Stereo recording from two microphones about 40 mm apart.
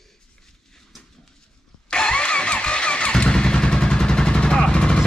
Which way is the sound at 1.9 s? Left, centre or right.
Left.